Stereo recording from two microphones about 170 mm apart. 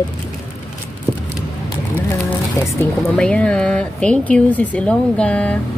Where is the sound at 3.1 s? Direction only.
5° left (ahead or behind).